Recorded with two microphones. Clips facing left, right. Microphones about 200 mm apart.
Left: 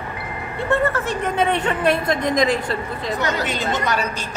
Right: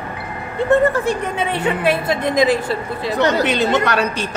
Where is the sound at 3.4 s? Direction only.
70° right (ahead or behind).